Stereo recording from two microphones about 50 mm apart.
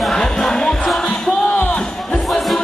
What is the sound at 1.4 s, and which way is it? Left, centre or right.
Music, left.